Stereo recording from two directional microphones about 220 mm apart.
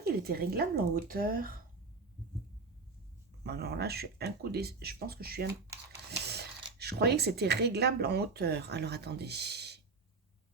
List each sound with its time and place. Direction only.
0.0 s speech: 45° right (ahead or behind)
3.4 s speech: 45° right (ahead or behind)